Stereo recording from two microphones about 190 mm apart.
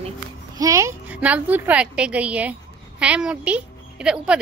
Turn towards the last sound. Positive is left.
turn(degrees=-5)  # may be behind; listen again after turning